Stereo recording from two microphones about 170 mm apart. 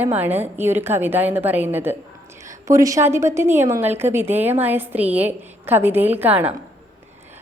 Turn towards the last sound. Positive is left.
turn(degrees=-10)  # may be behind; listen again after turning